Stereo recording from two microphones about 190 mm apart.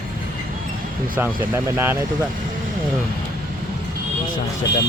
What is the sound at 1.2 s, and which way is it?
Speech, 10° right (ahead or behind).